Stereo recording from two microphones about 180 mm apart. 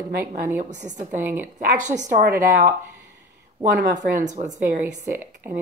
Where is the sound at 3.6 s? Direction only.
45° right (ahead or behind).